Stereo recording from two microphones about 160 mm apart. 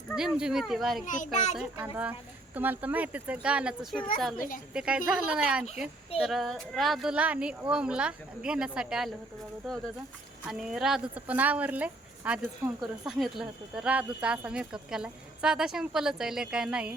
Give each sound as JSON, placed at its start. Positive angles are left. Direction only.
{"t": 0.2, "sound": "speech", "side_deg": -5}
{"t": 1.0, "sound": "a child's voice", "side_deg": 55}
{"t": 1.5, "sound": "speech", "side_deg": -10}
{"t": 4.4, "sound": "speech", "side_deg": 60}
{"t": 4.7, "sound": "speech", "side_deg": -5}
{"t": 10.5, "sound": "speech", "side_deg": -5}